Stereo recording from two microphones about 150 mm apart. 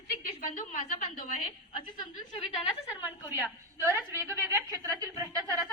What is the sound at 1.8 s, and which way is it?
Speech, 30° left (ahead or behind).